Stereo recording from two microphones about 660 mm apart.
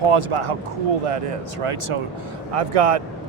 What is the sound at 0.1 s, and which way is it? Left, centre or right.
Speech, right.